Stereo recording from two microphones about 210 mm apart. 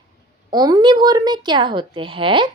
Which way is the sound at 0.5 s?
20° right (ahead or behind).